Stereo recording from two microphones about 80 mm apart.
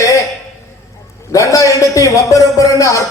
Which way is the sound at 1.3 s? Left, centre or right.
Left.